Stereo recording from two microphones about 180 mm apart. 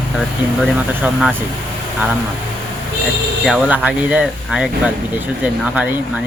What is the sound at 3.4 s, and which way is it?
Speech, centre (ahead or behind).